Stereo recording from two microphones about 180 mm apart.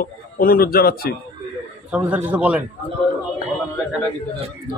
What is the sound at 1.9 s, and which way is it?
Speech, 10° right (ahead or behind).